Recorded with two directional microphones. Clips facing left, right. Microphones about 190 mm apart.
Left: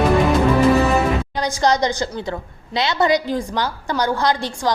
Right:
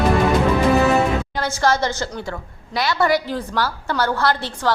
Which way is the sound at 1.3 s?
15° left (ahead or behind).